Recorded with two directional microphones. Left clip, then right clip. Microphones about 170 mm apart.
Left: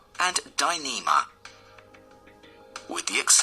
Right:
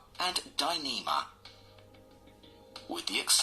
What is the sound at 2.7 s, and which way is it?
Speech, 15° left (ahead or behind).